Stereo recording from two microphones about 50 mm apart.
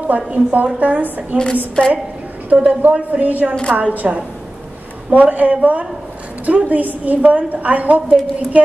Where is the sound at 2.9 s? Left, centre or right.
Right.